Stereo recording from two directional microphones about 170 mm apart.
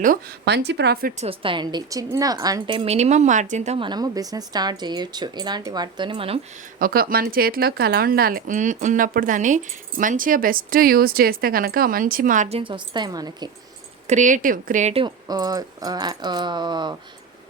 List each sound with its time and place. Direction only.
0.4 s speech: 80° right
1.1 s speech: 35° right (ahead or behind)
3.8 s speech: 25° right (ahead or behind)
6.7 s speech: 60° right (ahead or behind); by 13.5 s 25° right (ahead or behind)
14.1 s speech: 45° right (ahead or behind)
15.0 s speech: 25° right (ahead or behind)